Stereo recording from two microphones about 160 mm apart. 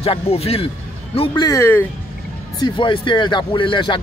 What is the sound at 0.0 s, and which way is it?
Speech, 40° left (ahead or behind).